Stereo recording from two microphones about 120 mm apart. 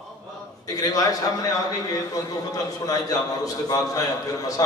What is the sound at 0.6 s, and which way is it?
A man's voice, 30° left (ahead or behind).